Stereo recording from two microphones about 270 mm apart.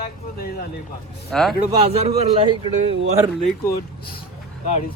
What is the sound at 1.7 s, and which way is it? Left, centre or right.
A man's voice, centre.